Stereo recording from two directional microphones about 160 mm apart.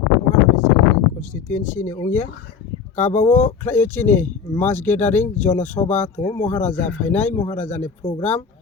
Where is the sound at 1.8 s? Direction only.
15° left (ahead or behind).